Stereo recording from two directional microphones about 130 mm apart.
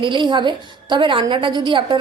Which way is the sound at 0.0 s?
40° right (ahead or behind).